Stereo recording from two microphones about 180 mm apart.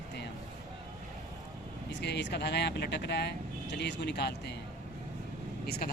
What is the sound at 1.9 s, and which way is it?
Speech, 70° left (ahead or behind).